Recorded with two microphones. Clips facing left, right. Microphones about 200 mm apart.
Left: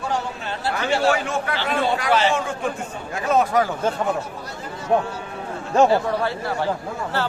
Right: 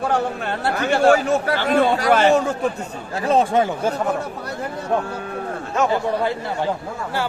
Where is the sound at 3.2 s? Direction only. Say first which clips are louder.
Right 2 dB; 30° right (ahead or behind).